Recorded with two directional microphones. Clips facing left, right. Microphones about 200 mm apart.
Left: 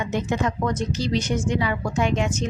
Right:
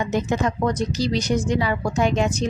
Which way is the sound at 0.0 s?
40° right (ahead or behind).